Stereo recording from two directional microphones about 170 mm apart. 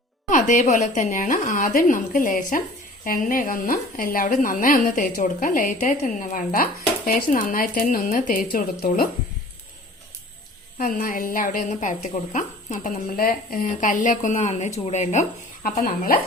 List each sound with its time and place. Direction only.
0.3 s a woman's voice: 50° left (ahead or behind)
10.8 s a woman's voice: 55° left (ahead or behind)